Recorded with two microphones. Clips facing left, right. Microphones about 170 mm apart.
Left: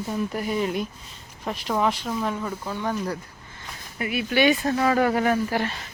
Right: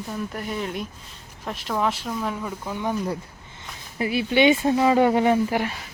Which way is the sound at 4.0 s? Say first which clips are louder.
Right 2 dB; 30° right (ahead or behind).